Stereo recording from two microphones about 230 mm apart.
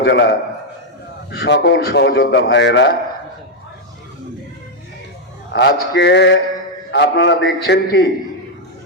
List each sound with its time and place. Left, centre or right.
0.0 s a man's voice: left
1.4 s a man's voice: left
5.5 s a man's voice: left